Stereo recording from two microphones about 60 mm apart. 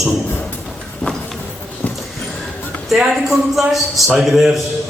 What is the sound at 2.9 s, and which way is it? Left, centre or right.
A man's voice, centre.